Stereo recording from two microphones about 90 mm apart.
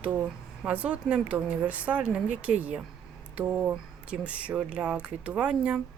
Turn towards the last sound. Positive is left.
turn(degrees=-10)  # may be behind; listen again after turning